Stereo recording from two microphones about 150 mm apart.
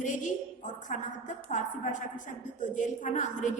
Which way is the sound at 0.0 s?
55° left (ahead or behind).